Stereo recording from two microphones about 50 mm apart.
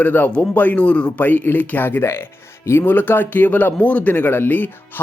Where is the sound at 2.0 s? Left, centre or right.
Left.